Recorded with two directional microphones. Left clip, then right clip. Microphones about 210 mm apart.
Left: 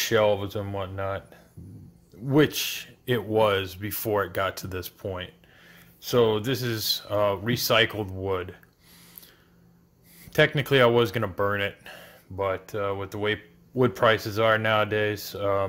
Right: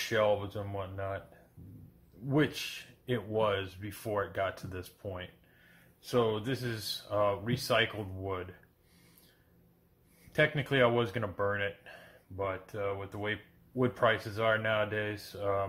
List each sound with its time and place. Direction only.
0.0 s speech: 45° left (ahead or behind)
2.2 s speech: 45° left (ahead or behind)
10.3 s speech: 45° left (ahead or behind)